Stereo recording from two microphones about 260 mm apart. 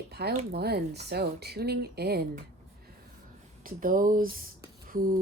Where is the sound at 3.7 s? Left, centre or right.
Right.